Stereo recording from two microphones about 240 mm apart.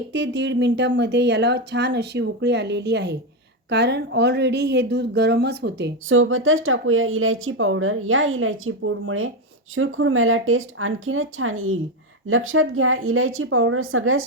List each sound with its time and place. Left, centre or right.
0.1 s a woman's voice: right